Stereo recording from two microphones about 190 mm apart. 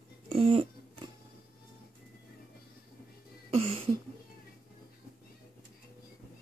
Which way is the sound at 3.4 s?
30° right (ahead or behind).